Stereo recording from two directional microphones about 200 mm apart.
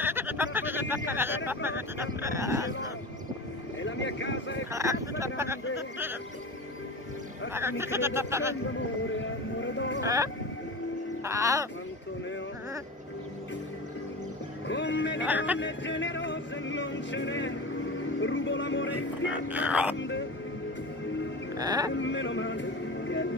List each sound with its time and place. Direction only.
0.0 s speech: 10° right (ahead or behind)
3.8 s a sound: 65° left (ahead or behind)
4.7 s speech: 15° right (ahead or behind)
7.5 s speech: 10° right (ahead or behind)
9.6 s a sound: 65° left (ahead or behind)
10.0 s speech: 15° right (ahead or behind)
14.7 s speech: 65° left (ahead or behind)
15.2 s speech: 10° right (ahead or behind)
15.6 s speech: 65° left (ahead or behind)
18.2 s music: 70° left (ahead or behind)
19.5 s speech: 5° right (ahead or behind)
20.0 s music: 65° left (ahead or behind)
21.5 s speech: 20° right (ahead or behind)
21.9 s music: 65° left (ahead or behind)